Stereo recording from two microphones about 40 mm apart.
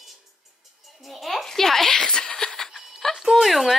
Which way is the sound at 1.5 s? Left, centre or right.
Centre.